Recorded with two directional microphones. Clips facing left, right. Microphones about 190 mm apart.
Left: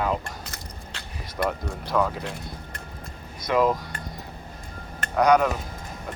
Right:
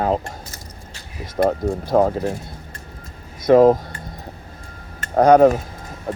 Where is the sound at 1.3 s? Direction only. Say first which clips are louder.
Right 9 dB; 45° right (ahead or behind).